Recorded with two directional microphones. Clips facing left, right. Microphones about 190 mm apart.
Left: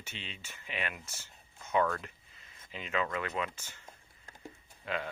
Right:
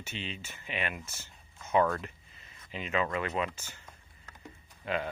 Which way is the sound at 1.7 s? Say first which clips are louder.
Right 3 dB; 25° right (ahead or behind).